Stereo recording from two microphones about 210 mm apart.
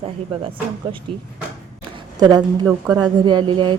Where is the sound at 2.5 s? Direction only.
20° right (ahead or behind).